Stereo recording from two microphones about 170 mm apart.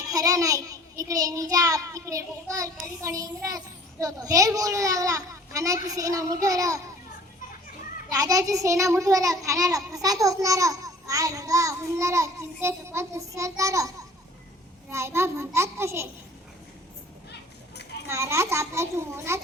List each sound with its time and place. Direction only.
0.1 s a child's voice: 20° right (ahead or behind)
8.1 s a child's voice: 20° right (ahead or behind)
17.3 s children playing: 80° left
18.1 s a child's voice: 15° right (ahead or behind)